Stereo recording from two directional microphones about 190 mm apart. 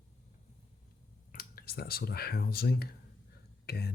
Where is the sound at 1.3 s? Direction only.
50° left (ahead or behind).